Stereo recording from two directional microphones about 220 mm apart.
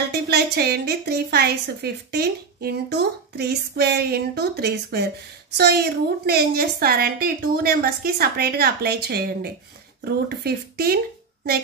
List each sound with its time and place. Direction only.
0.1 s a woman's voice: 45° right (ahead or behind)